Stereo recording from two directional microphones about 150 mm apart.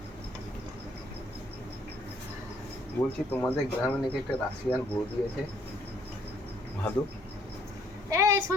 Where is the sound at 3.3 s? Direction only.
10° left (ahead or behind).